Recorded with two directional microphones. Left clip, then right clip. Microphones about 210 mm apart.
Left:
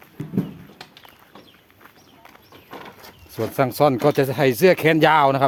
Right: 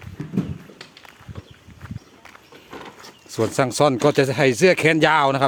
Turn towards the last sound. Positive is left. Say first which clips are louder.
# left 1 dB
turn(degrees=-5)  # may be behind; listen again after turning